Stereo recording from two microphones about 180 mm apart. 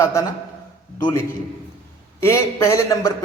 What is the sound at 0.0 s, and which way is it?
Speech, 15° left (ahead or behind).